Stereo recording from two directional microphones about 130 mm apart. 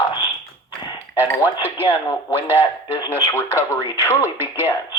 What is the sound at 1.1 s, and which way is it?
Speech, 15° right (ahead or behind).